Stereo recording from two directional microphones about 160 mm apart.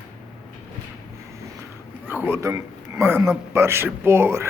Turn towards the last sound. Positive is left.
turn(degrees=-15)  # may be behind; listen again after turning